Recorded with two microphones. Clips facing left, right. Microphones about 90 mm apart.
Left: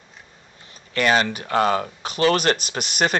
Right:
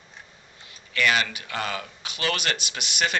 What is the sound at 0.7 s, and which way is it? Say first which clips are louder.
Speech: left 4 dB; 35° left (ahead or behind).